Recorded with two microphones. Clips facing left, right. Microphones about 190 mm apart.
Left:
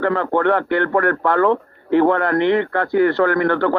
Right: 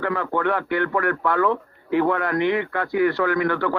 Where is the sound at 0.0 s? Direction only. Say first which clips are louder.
Left 6 dB; 55° left (ahead or behind).